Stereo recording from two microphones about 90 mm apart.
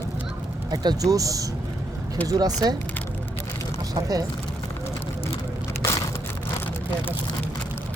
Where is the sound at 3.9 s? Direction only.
45° right (ahead or behind).